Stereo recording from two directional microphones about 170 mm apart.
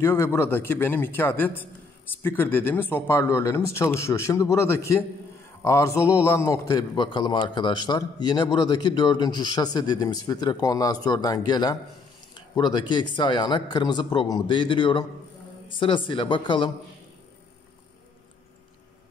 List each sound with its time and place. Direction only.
0.0 s a man's voice: 15° left (ahead or behind)